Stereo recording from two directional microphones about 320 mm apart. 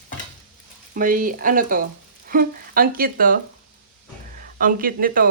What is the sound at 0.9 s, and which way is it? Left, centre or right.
Speech, right.